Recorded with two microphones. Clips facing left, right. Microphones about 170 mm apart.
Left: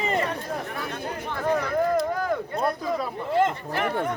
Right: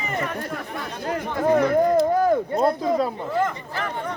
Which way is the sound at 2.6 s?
25° right (ahead or behind).